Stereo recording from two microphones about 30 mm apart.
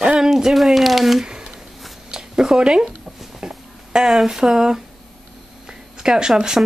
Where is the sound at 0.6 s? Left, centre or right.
Centre.